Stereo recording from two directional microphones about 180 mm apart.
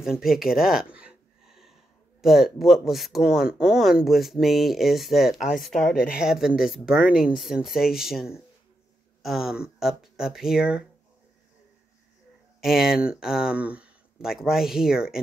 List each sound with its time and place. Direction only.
0.0 s speech: centre (ahead or behind)
0.9 s a sound: 5° right (ahead or behind)
2.2 s speech: centre (ahead or behind)
5.9 s speech: 55° left (ahead or behind)
6.2 s speech: 5° right (ahead or behind)
12.5 s speech: centre (ahead or behind)